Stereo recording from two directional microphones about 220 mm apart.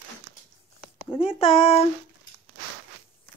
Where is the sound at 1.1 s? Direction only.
25° left (ahead or behind).